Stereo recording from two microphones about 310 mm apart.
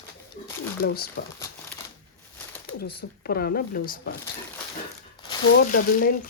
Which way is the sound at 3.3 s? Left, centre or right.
Left.